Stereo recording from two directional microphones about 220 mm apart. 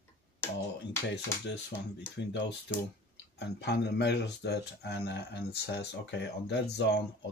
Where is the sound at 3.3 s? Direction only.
50° left (ahead or behind).